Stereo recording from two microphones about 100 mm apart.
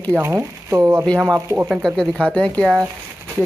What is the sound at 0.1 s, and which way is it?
Speech, 25° right (ahead or behind).